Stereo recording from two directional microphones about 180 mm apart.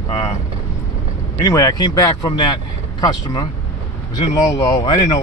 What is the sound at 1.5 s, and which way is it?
Speech, 20° left (ahead or behind).